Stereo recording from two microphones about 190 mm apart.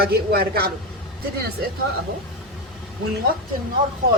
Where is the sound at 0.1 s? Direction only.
55° right (ahead or behind).